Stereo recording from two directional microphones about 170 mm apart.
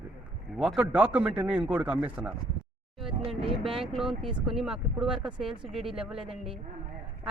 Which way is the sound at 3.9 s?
Centre (ahead or behind).